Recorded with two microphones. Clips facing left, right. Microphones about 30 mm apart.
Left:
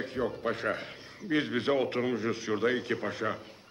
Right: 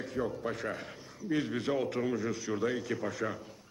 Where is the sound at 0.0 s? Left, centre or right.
Left.